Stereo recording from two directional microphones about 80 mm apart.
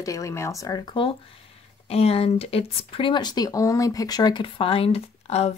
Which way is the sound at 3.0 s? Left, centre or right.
Left.